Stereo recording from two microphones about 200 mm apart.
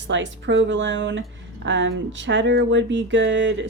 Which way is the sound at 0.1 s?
65° right (ahead or behind).